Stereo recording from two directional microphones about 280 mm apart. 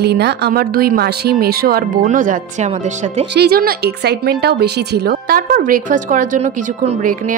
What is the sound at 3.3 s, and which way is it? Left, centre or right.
Speech, right.